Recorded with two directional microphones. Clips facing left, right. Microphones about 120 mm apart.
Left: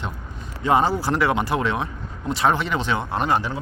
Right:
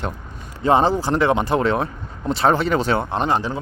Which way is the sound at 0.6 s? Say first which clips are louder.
Right 3 dB; 30° right (ahead or behind).